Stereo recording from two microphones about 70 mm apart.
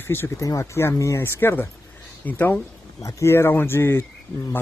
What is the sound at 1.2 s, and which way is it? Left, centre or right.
Speech, left.